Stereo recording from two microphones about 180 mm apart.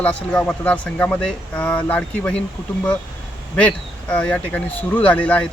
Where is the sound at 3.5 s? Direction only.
5° left (ahead or behind).